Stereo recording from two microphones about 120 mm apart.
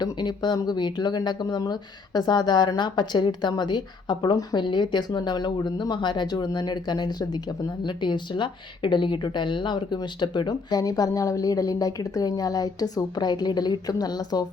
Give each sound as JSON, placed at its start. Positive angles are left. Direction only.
{"t": 0.0, "sound": "speech", "side_deg": 35}